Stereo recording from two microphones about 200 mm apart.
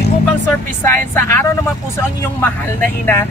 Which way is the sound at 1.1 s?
10° left (ahead or behind).